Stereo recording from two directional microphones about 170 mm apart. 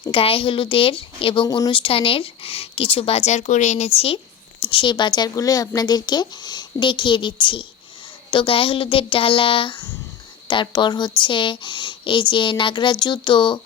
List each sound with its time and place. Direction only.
0.1 s speech: 35° left (ahead or behind)